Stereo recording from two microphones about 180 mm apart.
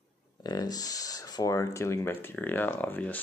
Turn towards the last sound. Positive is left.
turn(degrees=10)  # may be behind; listen again after turning